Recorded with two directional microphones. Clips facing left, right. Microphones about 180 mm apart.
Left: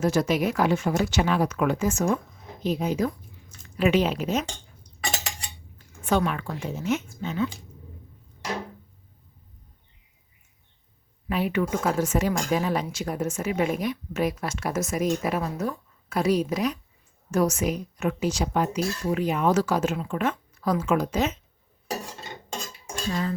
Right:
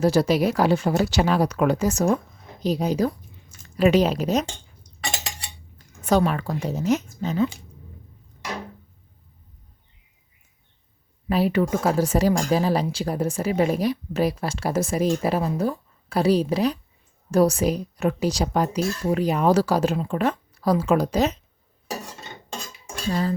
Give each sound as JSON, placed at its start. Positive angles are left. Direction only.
{"t": 0.0, "sound": "speech", "side_deg": -35}
{"t": 6.0, "sound": "speech", "side_deg": -40}
{"t": 11.3, "sound": "speech", "side_deg": -35}